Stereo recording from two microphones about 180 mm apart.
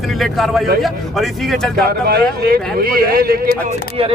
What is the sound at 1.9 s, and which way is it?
Speech, 60° right (ahead or behind).